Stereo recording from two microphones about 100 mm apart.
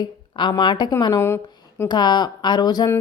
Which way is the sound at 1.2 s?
25° left (ahead or behind).